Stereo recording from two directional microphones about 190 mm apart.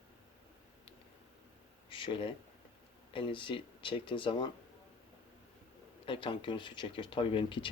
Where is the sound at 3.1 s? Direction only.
25° left (ahead or behind).